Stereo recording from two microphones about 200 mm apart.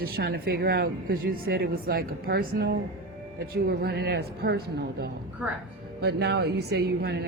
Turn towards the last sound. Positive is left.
turn(degrees=-55)  # may be behind; listen again after turning